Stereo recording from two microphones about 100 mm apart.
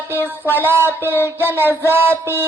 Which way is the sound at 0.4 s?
20° right (ahead or behind).